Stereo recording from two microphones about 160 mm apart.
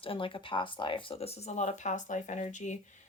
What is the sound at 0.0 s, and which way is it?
Speech, 35° left (ahead or behind).